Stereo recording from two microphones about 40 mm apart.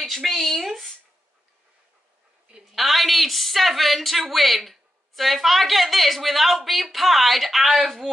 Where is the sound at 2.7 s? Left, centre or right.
Centre.